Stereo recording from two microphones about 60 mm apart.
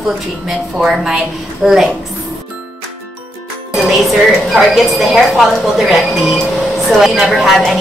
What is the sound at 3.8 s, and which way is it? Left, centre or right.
A woman's voice, centre.